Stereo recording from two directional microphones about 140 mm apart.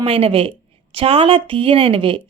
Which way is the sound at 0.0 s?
40° right (ahead or behind).